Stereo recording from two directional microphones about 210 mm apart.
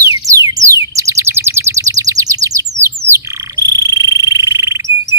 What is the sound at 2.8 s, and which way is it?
Frog, 15° right (ahead or behind).